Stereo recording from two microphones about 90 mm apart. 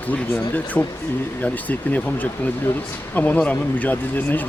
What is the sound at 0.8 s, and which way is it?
Speech, 20° left (ahead or behind).